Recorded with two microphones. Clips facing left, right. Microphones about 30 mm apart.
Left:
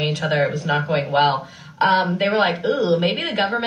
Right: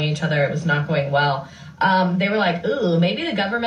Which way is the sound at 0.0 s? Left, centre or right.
Left.